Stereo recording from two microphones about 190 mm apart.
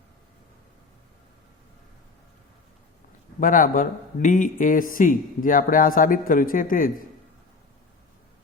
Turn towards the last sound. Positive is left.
turn(degrees=45)  # may be behind; listen again after turning